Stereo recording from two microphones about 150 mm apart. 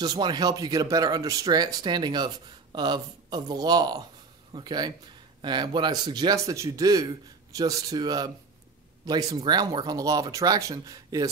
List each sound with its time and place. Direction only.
0.0 s speech: 30° right (ahead or behind)